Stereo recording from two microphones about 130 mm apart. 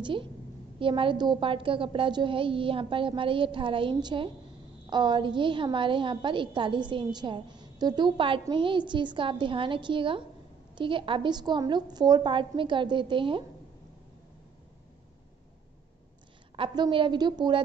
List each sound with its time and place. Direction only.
0.0 s a woman's voice: 40° right (ahead or behind)
16.5 s a woman's voice: 40° right (ahead or behind)